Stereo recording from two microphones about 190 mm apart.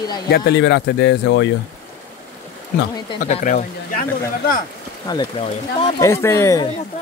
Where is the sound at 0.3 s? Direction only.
60° left (ahead or behind).